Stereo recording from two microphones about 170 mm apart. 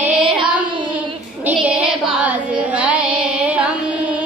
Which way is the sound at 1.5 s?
10° right (ahead or behind).